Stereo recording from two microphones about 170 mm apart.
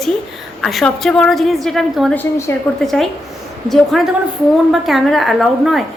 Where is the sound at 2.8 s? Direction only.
Centre (ahead or behind).